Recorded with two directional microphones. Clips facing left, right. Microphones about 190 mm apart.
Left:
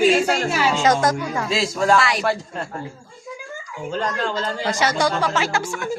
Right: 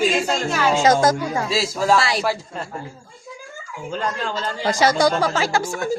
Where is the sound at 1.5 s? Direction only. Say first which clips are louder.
Left 1 dB; centre (ahead or behind).